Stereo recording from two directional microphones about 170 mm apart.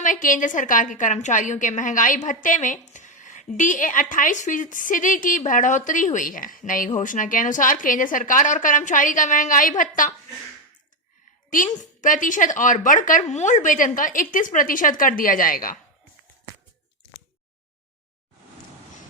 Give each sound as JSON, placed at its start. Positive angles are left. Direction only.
{"t": 0.0, "sound": "a woman's voice", "side_deg": 50}
{"t": 11.5, "sound": "a woman's voice", "side_deg": 50}